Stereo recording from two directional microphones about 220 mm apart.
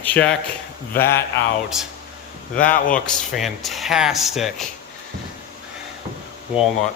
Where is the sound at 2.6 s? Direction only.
40° left (ahead or behind).